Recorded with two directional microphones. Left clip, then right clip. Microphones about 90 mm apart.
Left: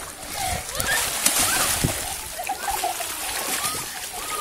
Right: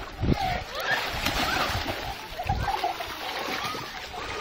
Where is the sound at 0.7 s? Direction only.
25° left (ahead or behind).